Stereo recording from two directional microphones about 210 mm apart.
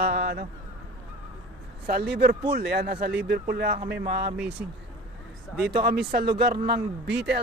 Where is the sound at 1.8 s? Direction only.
50° right (ahead or behind).